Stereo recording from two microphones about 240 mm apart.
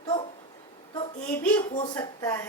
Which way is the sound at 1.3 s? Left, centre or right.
Centre.